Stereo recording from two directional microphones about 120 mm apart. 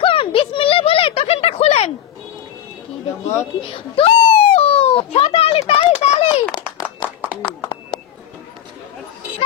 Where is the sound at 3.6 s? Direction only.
50° left (ahead or behind).